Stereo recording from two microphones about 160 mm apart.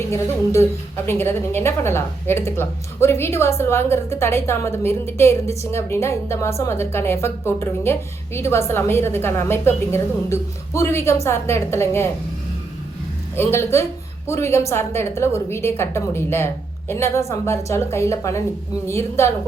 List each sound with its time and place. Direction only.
0.0 s a woman's voice: 15° left (ahead or behind)
13.3 s a woman's voice: 15° left (ahead or behind)